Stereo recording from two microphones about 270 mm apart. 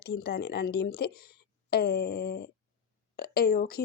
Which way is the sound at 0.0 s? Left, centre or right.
Left.